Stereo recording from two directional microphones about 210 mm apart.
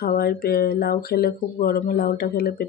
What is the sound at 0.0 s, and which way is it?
Speech, 45° left (ahead or behind).